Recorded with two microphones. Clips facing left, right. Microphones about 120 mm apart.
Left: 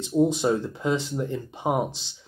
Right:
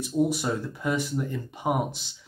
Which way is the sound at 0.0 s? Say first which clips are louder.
Left 4 dB; 25° left (ahead or behind).